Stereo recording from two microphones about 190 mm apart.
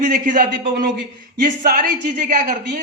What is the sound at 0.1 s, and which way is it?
Speech, 45° right (ahead or behind).